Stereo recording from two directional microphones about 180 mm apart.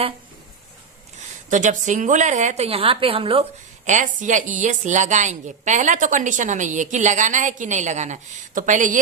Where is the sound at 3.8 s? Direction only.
45° right (ahead or behind).